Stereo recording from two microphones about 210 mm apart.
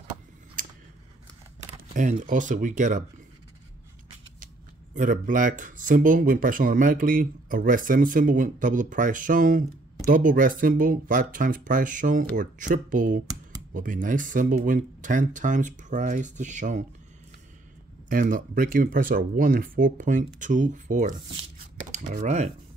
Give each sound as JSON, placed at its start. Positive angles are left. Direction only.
{"t": 2.0, "sound": "speech", "side_deg": -35}
{"t": 4.9, "sound": "speech", "side_deg": -35}
{"t": 18.0, "sound": "speech", "side_deg": -40}